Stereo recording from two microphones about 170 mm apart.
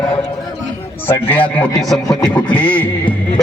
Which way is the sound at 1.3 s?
10° left (ahead or behind).